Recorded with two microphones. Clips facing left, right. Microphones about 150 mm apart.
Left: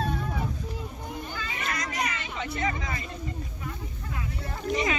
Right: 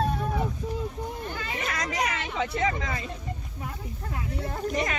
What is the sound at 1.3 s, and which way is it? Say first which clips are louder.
Hubbub: right 2 dB; 65° right (ahead or behind).